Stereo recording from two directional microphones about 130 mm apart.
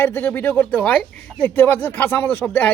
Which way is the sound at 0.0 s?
15° left (ahead or behind).